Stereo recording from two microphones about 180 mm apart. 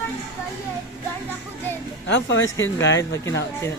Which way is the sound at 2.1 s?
90° left.